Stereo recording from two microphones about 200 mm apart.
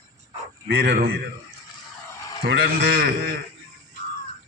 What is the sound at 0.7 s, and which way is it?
Speech, 50° right (ahead or behind).